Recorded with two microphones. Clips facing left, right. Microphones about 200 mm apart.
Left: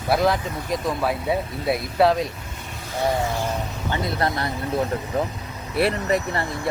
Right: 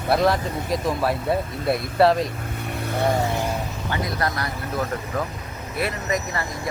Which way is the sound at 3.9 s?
25° left (ahead or behind).